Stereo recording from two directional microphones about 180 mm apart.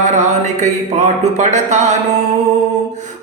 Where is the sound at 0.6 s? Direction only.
40° right (ahead or behind).